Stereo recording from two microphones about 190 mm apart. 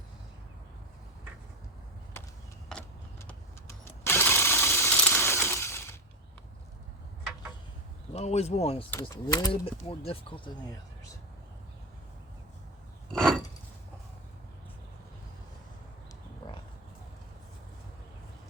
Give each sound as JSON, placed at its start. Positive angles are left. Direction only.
{"t": 2.6, "sound": "a sound", "side_deg": 5}
{"t": 8.1, "sound": "speech", "side_deg": 35}
{"t": 8.9, "sound": "speech", "side_deg": 15}